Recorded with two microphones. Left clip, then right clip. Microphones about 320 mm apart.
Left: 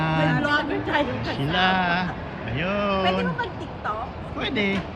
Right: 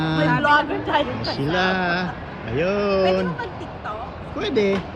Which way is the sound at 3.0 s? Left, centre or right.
Centre.